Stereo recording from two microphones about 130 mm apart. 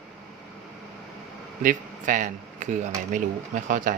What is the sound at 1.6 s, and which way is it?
Speech, 85° right.